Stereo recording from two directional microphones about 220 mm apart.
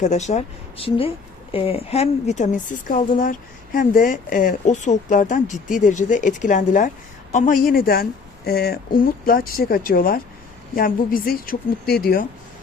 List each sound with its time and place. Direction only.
0.0 s a woman's voice: 30° left (ahead or behind)